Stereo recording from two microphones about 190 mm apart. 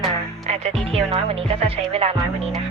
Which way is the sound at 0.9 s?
30° right (ahead or behind).